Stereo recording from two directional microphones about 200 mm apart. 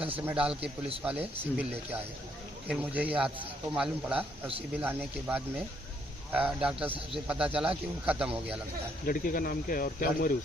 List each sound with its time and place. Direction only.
0.3 s speech: 5° right (ahead or behind)
9.0 s speech: 45° left (ahead or behind)